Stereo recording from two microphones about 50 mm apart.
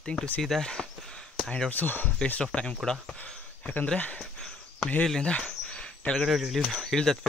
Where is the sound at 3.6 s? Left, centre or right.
Left.